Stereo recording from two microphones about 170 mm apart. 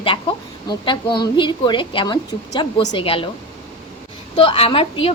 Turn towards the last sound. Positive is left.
turn(degrees=35)  # may be behind; listen again after turning